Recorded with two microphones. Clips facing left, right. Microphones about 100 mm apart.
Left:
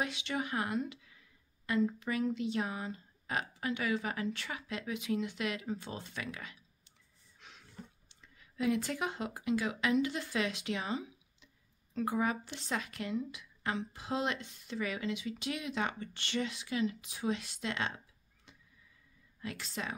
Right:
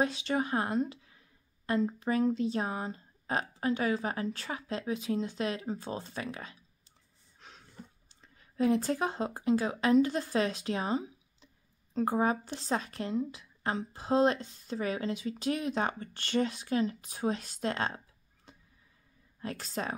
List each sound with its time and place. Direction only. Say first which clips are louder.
0.0 s speech: right 6 dB; 35° right (ahead or behind)
7.3 s a sound: right 3 dB; 35° right (ahead or behind)
8.1 s speech: right 1 dB; 35° right (ahead or behind)